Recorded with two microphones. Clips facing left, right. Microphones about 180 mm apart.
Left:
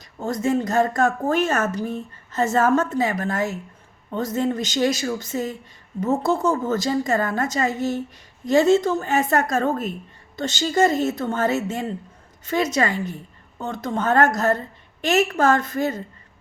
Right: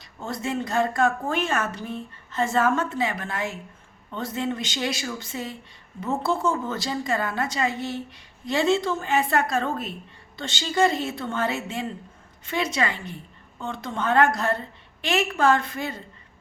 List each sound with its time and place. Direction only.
0.2 s a woman's voice: 40° left (ahead or behind)